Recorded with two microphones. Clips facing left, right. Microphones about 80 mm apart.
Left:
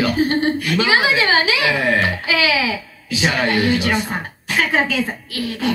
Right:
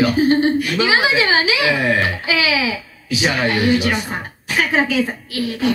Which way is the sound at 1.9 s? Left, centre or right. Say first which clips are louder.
Even; left.